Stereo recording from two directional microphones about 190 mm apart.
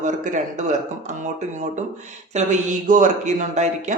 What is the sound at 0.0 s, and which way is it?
Speech, 40° right (ahead or behind).